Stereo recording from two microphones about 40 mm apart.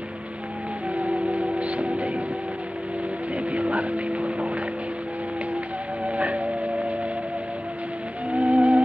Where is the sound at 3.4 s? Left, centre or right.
Right.